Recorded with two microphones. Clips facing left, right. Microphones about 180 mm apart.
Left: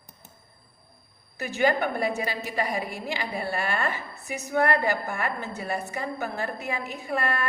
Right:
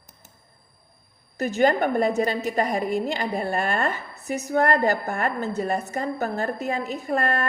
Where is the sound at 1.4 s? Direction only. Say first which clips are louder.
Right 4 dB; 40° right (ahead or behind).